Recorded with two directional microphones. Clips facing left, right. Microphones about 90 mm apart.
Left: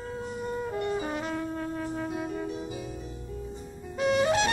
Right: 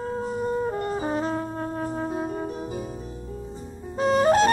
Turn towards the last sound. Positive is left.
turn(degrees=-40)  # may be behind; listen again after turning